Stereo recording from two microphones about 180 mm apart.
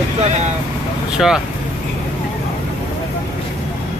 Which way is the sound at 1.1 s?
Centre (ahead or behind).